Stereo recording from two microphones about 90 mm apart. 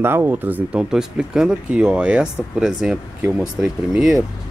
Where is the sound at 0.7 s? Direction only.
5° right (ahead or behind).